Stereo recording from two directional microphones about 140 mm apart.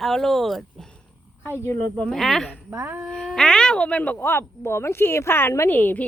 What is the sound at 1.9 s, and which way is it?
Speech, 5° left (ahead or behind).